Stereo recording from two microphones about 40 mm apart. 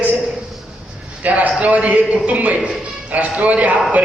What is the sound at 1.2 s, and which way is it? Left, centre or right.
A man's voice, right.